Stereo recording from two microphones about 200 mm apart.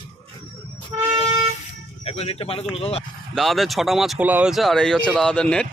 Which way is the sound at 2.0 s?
30° left (ahead or behind).